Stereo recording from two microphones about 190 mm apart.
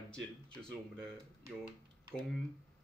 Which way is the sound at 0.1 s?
5° left (ahead or behind).